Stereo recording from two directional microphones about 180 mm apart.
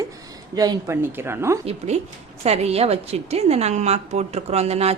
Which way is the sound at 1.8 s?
35° right (ahead or behind).